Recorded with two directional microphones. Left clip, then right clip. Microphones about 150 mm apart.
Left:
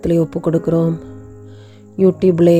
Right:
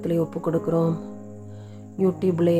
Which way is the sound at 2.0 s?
40° left (ahead or behind).